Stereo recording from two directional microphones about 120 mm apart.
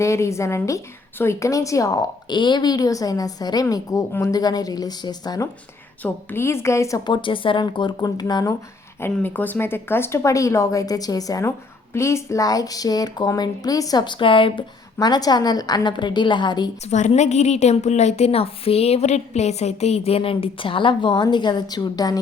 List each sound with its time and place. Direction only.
0.0 s a woman's voice: 25° left (ahead or behind)
6.0 s a woman's voice: 15° left (ahead or behind); by 8.5 s 35° left (ahead or behind)
9.0 s a woman's voice: 15° left (ahead or behind); by 14.6 s 45° left (ahead or behind)
14.9 s a woman's voice: 35° left (ahead or behind)
16.8 s a woman's voice: 70° left (ahead or behind); by 22.2 s 30° left (ahead or behind)